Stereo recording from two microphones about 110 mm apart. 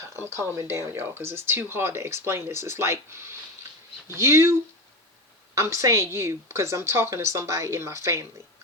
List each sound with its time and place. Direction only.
0.3 s speech: 25° right (ahead or behind)
5.5 s speech: 25° right (ahead or behind)